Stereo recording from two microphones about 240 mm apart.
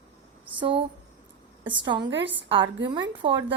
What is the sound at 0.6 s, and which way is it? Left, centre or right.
A woman's voice, right.